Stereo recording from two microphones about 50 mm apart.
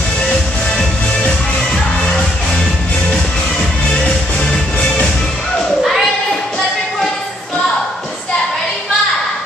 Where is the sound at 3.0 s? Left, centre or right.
Centre.